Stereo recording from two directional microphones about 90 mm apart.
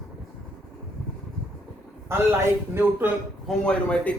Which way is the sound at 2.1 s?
25° right (ahead or behind).